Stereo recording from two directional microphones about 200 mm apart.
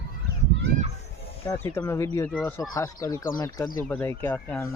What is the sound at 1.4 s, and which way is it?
Speech, 10° left (ahead or behind).